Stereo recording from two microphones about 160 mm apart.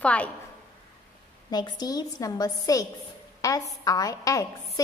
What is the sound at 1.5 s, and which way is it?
A woman's voice, 25° left (ahead or behind).